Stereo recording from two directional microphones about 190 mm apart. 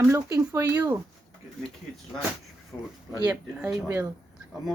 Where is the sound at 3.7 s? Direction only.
15° right (ahead or behind).